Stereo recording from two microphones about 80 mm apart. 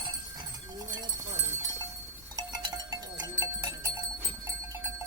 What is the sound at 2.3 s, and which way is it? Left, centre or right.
Cowbell, right.